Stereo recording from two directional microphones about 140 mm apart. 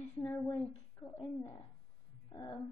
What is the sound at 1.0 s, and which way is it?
Speech, 15° left (ahead or behind).